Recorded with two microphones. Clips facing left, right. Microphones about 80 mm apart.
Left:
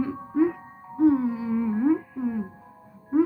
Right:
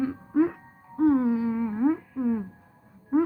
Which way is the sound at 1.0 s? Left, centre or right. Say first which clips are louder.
Left 1 dB; right.